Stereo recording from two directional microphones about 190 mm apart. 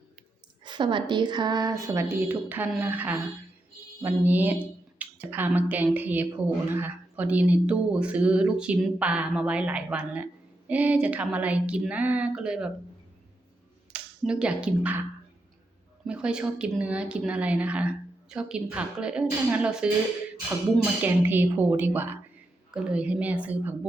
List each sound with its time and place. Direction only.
0.6 s speech: 25° right (ahead or behind); by 12.7 s 5° right (ahead or behind)
13.9 s speech: 5° right (ahead or behind)
16.0 s a woman's voice: 5° right (ahead or behind)
21.0 s speech: 10° right (ahead or behind)